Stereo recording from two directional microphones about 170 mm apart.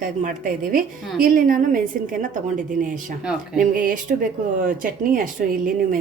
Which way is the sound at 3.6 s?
50° right (ahead or behind).